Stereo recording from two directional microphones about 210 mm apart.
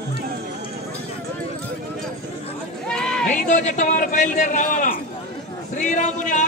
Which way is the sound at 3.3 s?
35° left (ahead or behind).